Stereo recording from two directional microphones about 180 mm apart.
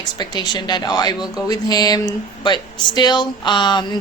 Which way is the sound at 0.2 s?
25° left (ahead or behind).